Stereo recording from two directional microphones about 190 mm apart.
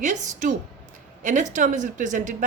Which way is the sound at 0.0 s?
40° right (ahead or behind).